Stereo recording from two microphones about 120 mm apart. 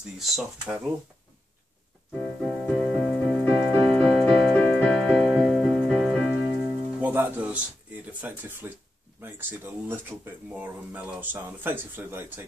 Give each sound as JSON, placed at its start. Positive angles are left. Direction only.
{"t": 0.2, "sound": "speech", "side_deg": -5}
{"t": 2.1, "sound": "music", "side_deg": 5}
{"t": 7.0, "sound": "speech", "side_deg": -15}